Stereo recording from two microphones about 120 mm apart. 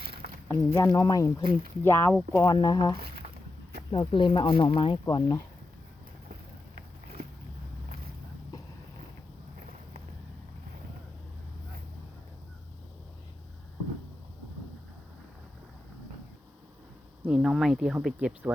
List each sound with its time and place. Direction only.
0.4 s speech: 25° left (ahead or behind)
3.9 s speech: 45° left (ahead or behind)
5.0 s speech: 35° left (ahead or behind)
17.2 s speech: 5° right (ahead or behind)